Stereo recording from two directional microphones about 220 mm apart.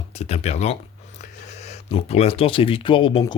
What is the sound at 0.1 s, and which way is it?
Speech, 30° left (ahead or behind).